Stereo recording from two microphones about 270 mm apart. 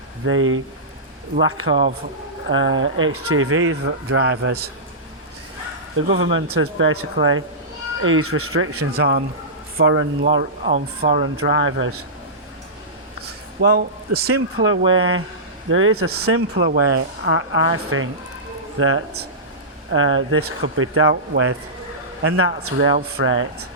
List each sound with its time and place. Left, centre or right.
0.3 s speech: right
6.1 s speech: right
9.0 s speech: right
10.6 s speech: right
11.3 s speech: right
13.2 s a sound: right
14.3 s speech: right